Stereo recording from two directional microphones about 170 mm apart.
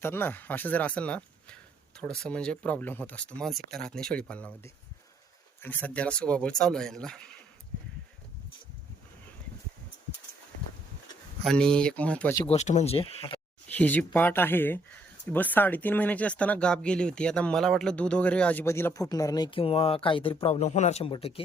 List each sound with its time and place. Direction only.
0.0 s speech: 10° left (ahead or behind)
11.4 s speech: 5° left (ahead or behind)
12.5 s speech: 40° left (ahead or behind)
13.7 s speech: 10° left (ahead or behind); by 21.4 s 35° left (ahead or behind)